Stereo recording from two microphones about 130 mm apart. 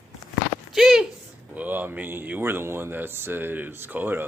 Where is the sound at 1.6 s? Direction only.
15° right (ahead or behind).